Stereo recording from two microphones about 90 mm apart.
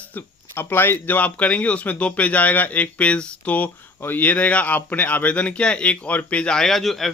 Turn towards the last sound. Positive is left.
turn(degrees=0)  # may be behind; listen again after turning